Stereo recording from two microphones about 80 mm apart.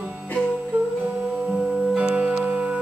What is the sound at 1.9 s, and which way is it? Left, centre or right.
Music, centre.